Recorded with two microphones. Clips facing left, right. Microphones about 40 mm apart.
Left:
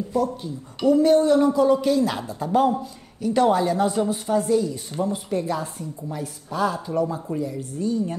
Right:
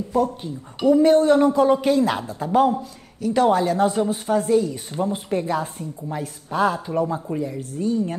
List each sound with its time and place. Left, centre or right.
0.1 s speech: right
0.8 s a woman's voice: centre
2.2 s speech: centre
5.0 s a woman's voice: right